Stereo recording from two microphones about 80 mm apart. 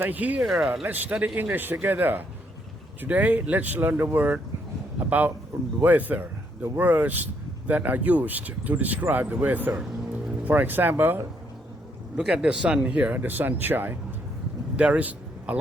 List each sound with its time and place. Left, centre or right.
0.0 s speech: right
0.4 s speech: centre
0.9 s a man's voice: right
12.1 s speech: centre
14.8 s a sound: centre